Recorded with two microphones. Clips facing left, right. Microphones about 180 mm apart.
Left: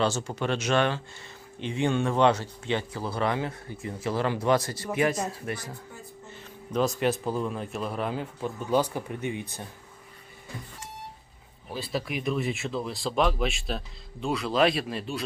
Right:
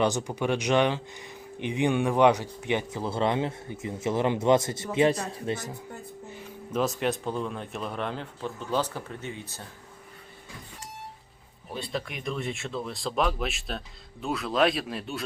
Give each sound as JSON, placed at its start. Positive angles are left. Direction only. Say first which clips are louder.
{"t": 0.0, "sound": "speech", "louder": "right 1 dB", "side_deg": -15}
{"t": 6.3, "sound": "speech", "louder": "left 1 dB", "side_deg": -10}
{"t": 11.7, "sound": "speech", "louder": "left 2 dB", "side_deg": 5}